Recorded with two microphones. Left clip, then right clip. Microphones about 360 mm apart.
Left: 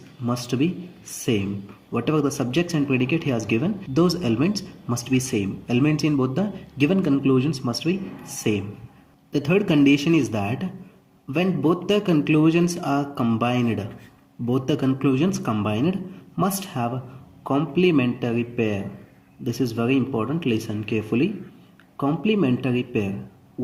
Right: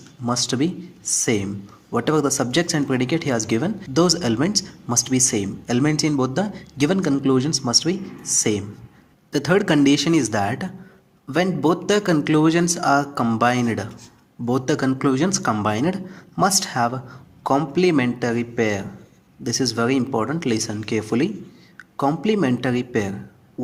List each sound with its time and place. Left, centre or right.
0.3 s speech: right